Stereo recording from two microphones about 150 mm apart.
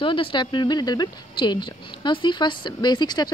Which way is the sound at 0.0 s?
35° left (ahead or behind).